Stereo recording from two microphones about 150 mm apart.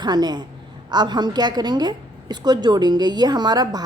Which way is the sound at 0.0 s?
30° right (ahead or behind).